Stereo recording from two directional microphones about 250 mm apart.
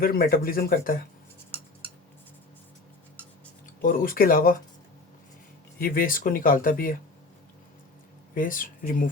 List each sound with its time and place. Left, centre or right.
0.0 s speech: left
3.8 s speech: left
5.8 s speech: left
8.4 s speech: left